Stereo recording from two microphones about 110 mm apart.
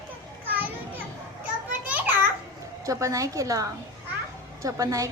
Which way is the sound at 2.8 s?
30° right (ahead or behind).